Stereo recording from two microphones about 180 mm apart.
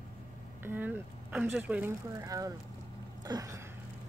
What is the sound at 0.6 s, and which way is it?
Speech, 10° right (ahead or behind).